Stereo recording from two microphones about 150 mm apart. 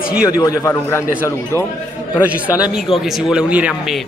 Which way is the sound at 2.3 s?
10° right (ahead or behind).